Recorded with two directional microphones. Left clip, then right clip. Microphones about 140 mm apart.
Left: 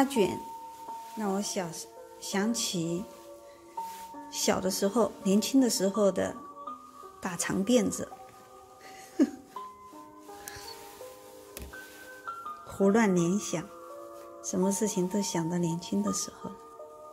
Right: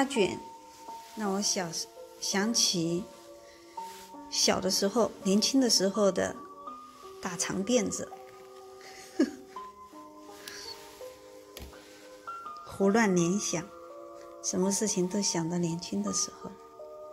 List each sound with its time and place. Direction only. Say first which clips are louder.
0.0 s speech: left 1 dB; 20° left (ahead or behind)
1.1 s speech: right 2 dB; centre (ahead or behind)
4.3 s speech: right 2 dB; 10° left (ahead or behind)
7.2 s speech: left 1 dB; 30° left (ahead or behind)
9.2 s speech: left 1 dB; 15° left (ahead or behind)
12.7 s speech: even; 10° left (ahead or behind); by 16.2 s 30° left (ahead or behind)